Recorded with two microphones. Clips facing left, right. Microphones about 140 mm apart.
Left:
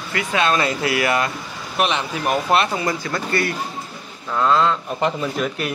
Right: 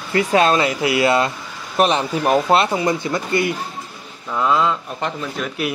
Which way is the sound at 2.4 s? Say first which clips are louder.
Right 3 dB; 25° right (ahead or behind).